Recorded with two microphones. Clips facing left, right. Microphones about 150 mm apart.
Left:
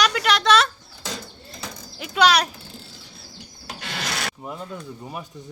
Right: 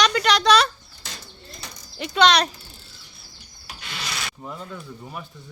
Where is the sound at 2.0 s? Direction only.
5° left (ahead or behind).